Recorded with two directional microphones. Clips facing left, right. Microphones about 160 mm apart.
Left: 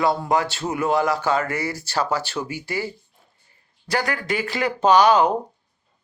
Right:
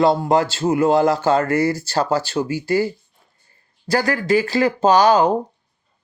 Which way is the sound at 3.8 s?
35° right (ahead or behind).